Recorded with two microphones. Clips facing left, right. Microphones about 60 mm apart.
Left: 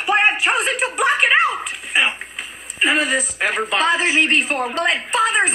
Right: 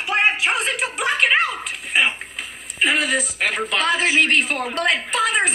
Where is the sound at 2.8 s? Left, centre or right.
Left.